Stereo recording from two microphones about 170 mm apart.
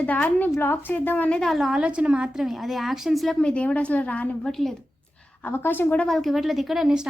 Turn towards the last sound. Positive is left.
turn(degrees=-5)  # may be behind; listen again after turning